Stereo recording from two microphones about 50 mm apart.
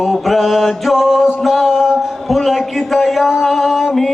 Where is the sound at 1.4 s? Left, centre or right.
Centre.